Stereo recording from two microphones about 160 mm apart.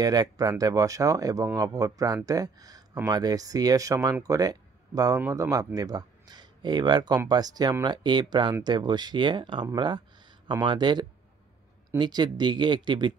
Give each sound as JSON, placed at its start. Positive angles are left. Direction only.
{"t": 0.0, "sound": "speech", "side_deg": -25}